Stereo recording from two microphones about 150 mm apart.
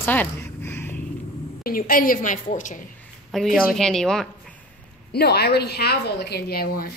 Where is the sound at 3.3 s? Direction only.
Centre (ahead or behind).